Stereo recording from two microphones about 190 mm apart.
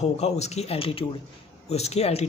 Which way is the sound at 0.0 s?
35° left (ahead or behind).